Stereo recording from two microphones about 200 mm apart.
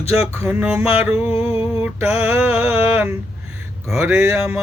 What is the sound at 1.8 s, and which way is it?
Mantra, 10° right (ahead or behind).